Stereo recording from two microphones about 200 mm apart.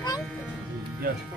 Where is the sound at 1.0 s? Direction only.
45° right (ahead or behind).